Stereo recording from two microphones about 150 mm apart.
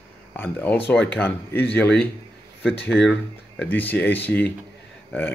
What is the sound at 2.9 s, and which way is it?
Speech, centre (ahead or behind).